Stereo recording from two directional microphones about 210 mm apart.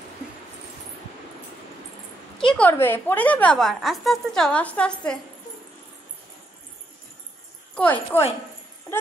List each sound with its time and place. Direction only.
2.3 s a woman's voice: 5° left (ahead or behind)
7.7 s speech: 10° left (ahead or behind)